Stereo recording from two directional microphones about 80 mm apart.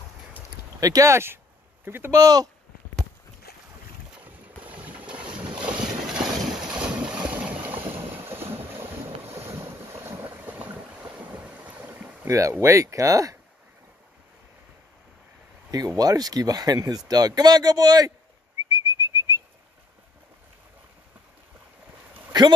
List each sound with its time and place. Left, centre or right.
0.7 s speech: right
2.1 s speech: right
4.2 s boat: centre
12.3 s speech: right
16.0 s speech: right
18.7 s whistling: right